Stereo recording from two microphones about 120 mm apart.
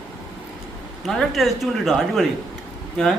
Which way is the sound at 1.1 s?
Centre (ahead or behind).